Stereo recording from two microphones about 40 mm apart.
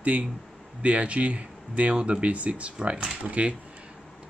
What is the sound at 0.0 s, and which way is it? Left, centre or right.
Speech, right.